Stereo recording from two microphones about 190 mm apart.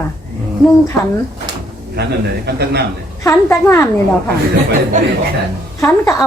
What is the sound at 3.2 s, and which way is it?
Speech, 15° left (ahead or behind).